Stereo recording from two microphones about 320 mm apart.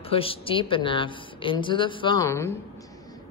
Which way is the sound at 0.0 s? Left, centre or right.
Centre.